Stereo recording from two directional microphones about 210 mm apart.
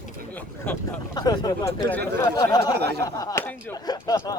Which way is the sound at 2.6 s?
50° right (ahead or behind).